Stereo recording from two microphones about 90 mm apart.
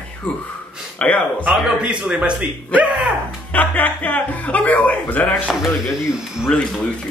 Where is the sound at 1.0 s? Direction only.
15° left (ahead or behind).